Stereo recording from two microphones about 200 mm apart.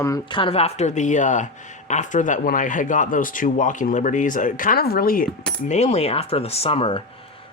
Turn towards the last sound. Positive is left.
turn(degrees=30)  # may be behind; listen again after turning